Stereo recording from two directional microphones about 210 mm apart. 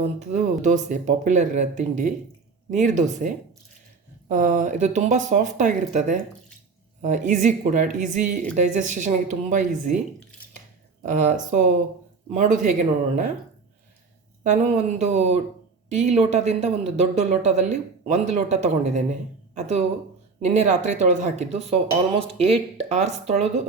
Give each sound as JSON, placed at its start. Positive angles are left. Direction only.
{"t": 0.2, "sound": "speech", "side_deg": -35}
{"t": 11.1, "sound": "speech", "side_deg": -35}
{"t": 14.4, "sound": "speech", "side_deg": -35}
{"t": 20.4, "sound": "speech", "side_deg": -35}